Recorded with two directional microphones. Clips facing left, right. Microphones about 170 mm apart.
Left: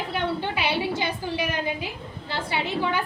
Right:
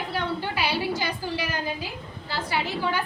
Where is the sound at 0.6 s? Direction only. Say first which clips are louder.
Right 1 dB; 20° left (ahead or behind).